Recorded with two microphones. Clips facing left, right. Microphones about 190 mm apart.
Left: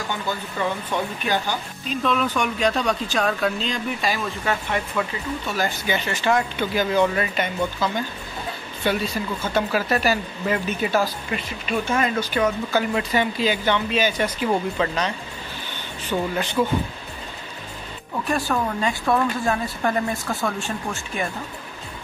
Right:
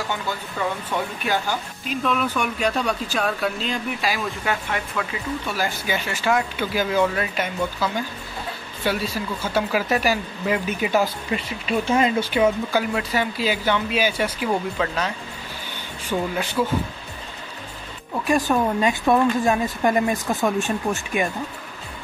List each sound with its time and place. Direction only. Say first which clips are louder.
1.2 s speech: even; 5° right (ahead or behind); by 12.3 s 25° right (ahead or behind)
12.7 s speech: left 1 dB; 5° right (ahead or behind)
18.2 s speech: right 4 dB; 15° right (ahead or behind)